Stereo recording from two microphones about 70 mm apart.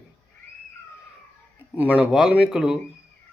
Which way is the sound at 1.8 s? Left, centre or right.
Right.